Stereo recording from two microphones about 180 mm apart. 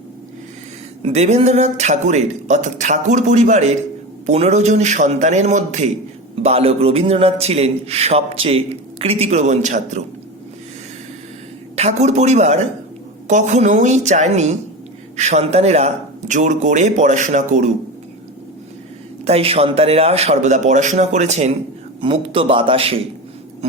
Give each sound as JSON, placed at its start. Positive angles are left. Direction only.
{"t": 1.0, "sound": "a man's voice", "side_deg": -40}
{"t": 11.8, "sound": "a man's voice", "side_deg": -40}
{"t": 19.2, "sound": "a man's voice", "side_deg": -35}